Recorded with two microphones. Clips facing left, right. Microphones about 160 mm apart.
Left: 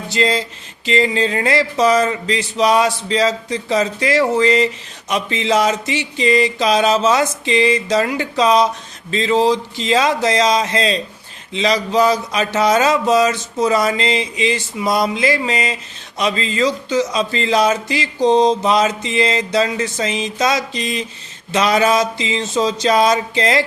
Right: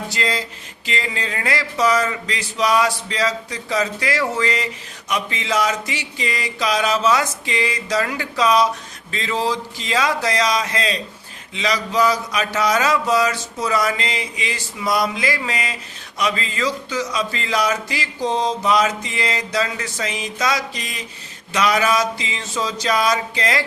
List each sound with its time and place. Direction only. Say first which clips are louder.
0.1 s speech: left 10 dB; 25° left (ahead or behind)